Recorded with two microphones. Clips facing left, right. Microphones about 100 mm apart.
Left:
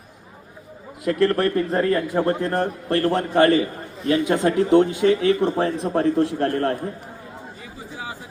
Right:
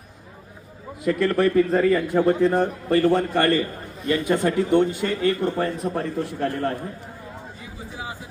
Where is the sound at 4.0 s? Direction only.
85° left.